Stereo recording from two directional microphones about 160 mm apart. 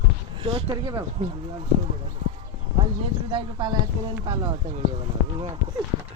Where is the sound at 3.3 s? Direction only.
30° right (ahead or behind).